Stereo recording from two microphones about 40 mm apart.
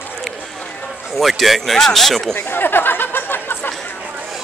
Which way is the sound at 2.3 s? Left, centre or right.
Left.